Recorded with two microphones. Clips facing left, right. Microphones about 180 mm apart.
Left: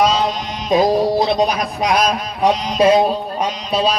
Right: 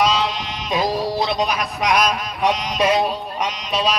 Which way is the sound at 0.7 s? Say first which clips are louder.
Left 7 dB; 35° left (ahead or behind).